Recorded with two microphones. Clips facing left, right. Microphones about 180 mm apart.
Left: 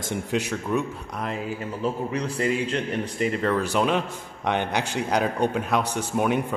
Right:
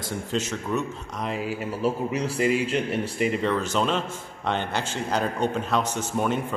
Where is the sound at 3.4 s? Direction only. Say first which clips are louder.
Left 2 dB; 10° left (ahead or behind).